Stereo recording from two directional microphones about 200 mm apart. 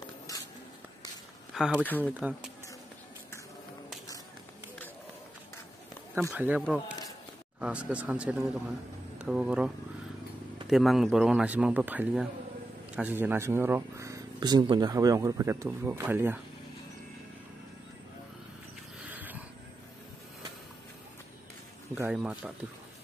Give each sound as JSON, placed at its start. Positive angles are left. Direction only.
{"t": 0.3, "sound": "writing", "side_deg": 15}
{"t": 1.5, "sound": "a sound", "side_deg": 0}
{"t": 1.8, "sound": "speech", "side_deg": 10}
{"t": 2.1, "sound": "speech", "side_deg": -5}
{"t": 6.3, "sound": "speech", "side_deg": -10}
{"t": 7.6, "sound": "speech", "side_deg": -5}
{"t": 10.7, "sound": "speech", "side_deg": 0}
{"t": 18.9, "sound": "wild animals", "side_deg": -10}
{"t": 21.9, "sound": "speech", "side_deg": -10}